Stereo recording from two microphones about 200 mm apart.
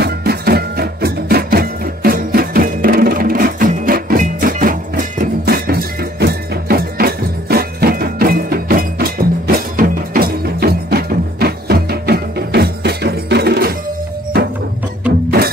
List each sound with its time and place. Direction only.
0.0 s music: 50° right (ahead or behind)